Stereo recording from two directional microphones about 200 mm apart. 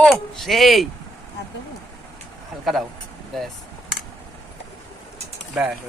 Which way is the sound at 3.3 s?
Centre (ahead or behind).